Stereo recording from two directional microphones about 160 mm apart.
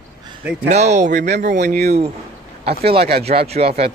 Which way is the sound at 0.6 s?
45° right (ahead or behind).